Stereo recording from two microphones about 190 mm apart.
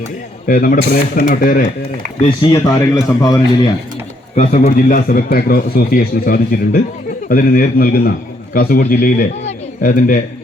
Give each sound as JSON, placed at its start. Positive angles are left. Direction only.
{"t": 0.4, "sound": "a man's voice", "side_deg": 50}
{"t": 2.2, "sound": "speech", "side_deg": 25}
{"t": 2.7, "sound": "a man's voice", "side_deg": 15}
{"t": 4.4, "sound": "a man's voice", "side_deg": 45}